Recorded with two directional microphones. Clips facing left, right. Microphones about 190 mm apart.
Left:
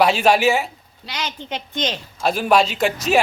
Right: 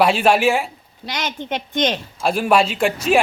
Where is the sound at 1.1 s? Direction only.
50° right (ahead or behind).